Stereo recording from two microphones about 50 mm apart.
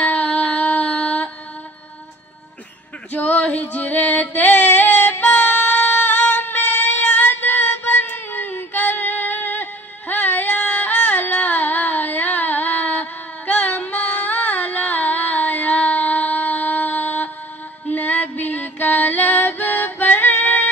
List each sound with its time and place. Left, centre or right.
0.0 s music: left
3.1 s female singing: left
17.9 s music: left